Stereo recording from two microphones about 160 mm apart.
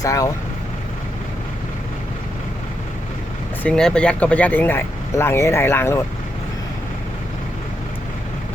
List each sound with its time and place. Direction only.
0.0 s speech: 20° left (ahead or behind)
3.6 s speech: 5° left (ahead or behind)